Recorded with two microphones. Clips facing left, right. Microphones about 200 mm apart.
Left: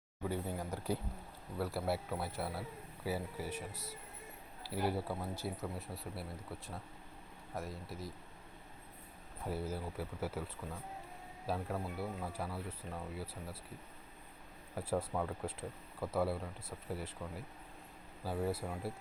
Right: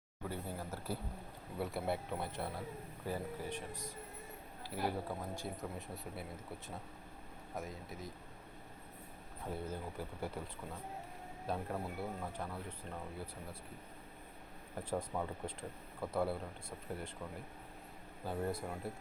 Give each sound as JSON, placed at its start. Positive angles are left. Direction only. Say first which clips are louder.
{"t": 0.3, "sound": "speech", "louder": "left 4 dB", "side_deg": 15}
{"t": 1.5, "sound": "speech", "louder": "left 1 dB", "side_deg": 0}
{"t": 7.5, "sound": "speech", "louder": "left 1 dB", "side_deg": 0}
{"t": 9.5, "sound": "speech", "louder": "left 2 dB", "side_deg": 5}
{"t": 11.4, "sound": "speech", "louder": "left 1 dB", "side_deg": 0}
{"t": 14.8, "sound": "speech", "louder": "left 2 dB", "side_deg": 5}